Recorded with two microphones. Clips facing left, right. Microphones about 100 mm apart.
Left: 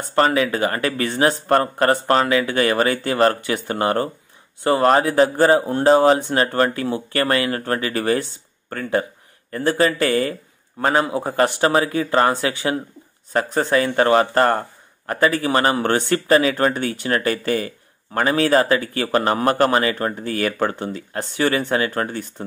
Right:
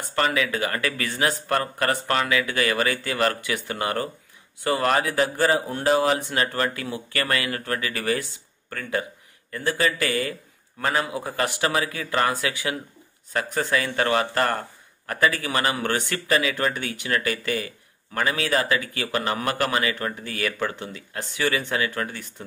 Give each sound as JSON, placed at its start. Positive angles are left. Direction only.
{"t": 0.1, "sound": "speech", "side_deg": 35}